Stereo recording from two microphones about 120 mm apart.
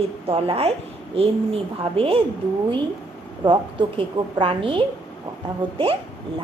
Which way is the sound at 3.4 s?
45° right (ahead or behind).